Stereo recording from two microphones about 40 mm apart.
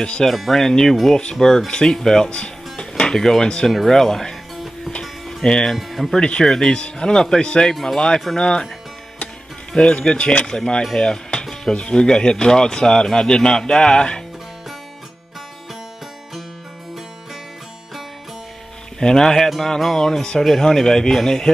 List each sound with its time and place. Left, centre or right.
0.5 s speech: centre
1.7 s speech: left
5.4 s speech: centre
5.8 s speech: centre
6.1 s speech: left
6.4 s speech: centre
6.7 s speech: left
9.7 s speech: left
18.9 s speech: centre